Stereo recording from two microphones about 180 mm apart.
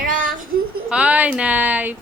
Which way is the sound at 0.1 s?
50° right (ahead or behind).